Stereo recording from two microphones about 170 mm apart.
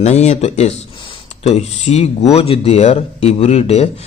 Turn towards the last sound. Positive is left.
turn(degrees=40)  # may be behind; listen again after turning